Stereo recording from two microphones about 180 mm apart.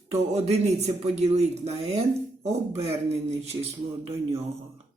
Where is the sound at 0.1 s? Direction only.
35° right (ahead or behind).